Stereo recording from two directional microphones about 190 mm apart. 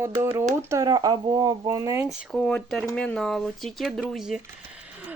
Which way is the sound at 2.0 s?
5° left (ahead or behind).